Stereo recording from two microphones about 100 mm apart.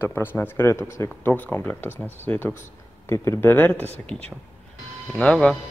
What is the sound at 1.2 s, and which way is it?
Speech, 15° left (ahead or behind).